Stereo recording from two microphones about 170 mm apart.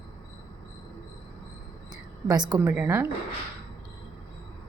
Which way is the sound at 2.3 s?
20° right (ahead or behind).